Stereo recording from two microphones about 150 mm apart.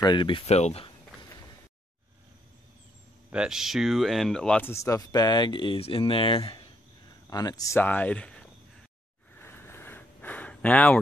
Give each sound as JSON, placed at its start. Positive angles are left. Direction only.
{"t": 0.0, "sound": "speech", "side_deg": 30}
{"t": 0.5, "sound": "speech", "side_deg": 45}
{"t": 3.3, "sound": "speech", "side_deg": -5}
{"t": 7.8, "sound": "speech", "side_deg": 10}
{"t": 9.3, "sound": "a sound", "side_deg": 15}